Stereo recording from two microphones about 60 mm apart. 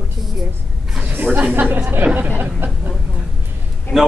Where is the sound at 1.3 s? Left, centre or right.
Centre.